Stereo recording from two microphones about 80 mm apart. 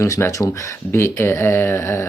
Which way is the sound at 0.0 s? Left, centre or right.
Left.